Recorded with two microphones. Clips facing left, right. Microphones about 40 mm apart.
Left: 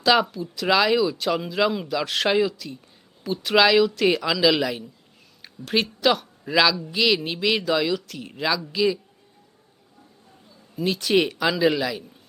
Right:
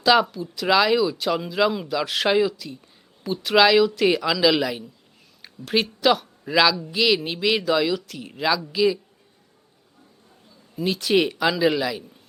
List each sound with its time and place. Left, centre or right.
0.0 s speech: centre
10.8 s speech: centre